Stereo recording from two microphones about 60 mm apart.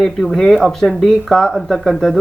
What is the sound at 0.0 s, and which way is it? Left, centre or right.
Speech, centre.